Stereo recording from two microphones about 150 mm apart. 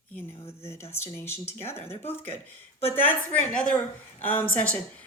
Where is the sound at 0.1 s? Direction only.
10° left (ahead or behind).